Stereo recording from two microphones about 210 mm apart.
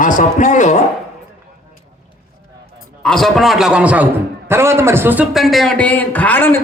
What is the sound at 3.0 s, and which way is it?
A man's voice, centre (ahead or behind).